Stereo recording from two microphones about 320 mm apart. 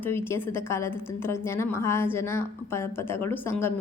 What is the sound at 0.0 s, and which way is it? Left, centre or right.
A woman's voice, centre.